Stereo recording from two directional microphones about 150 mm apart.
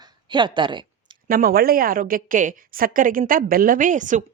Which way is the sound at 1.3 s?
75° right (ahead or behind).